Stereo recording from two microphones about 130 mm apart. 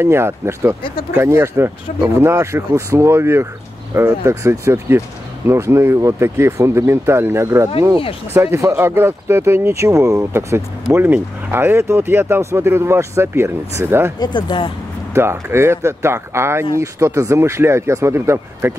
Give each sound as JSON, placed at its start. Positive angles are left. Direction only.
{"t": 0.0, "sound": "speech", "side_deg": -20}
{"t": 14.2, "sound": "speech", "side_deg": 35}
{"t": 15.1, "sound": "speech", "side_deg": -20}